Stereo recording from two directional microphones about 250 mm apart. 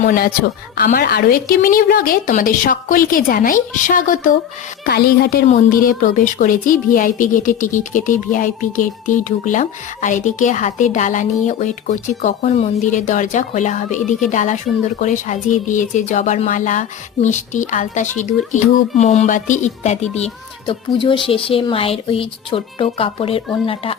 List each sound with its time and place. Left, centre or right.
0.0 s a woman's voice: left